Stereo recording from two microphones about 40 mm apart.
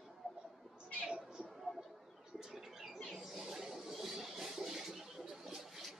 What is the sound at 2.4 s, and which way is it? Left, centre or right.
Bird, centre.